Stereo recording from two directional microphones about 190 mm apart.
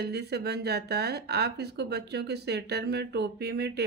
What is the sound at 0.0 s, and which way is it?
Speech, 60° right (ahead or behind).